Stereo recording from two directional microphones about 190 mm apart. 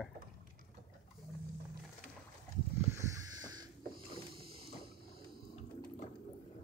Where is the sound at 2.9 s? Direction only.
20° right (ahead or behind).